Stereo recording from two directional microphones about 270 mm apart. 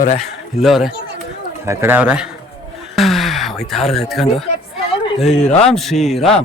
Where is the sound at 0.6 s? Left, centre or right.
Centre.